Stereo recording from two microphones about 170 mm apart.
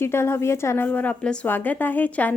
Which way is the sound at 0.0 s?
15° left (ahead or behind).